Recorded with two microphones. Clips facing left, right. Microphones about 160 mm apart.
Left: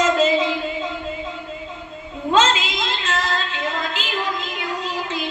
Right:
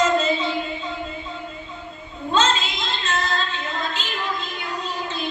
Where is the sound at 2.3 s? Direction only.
90° left.